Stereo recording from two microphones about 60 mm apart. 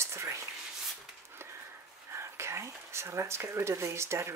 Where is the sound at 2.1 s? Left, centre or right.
Right.